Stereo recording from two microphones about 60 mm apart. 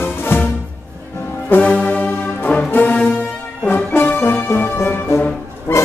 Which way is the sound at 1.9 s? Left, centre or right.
Left.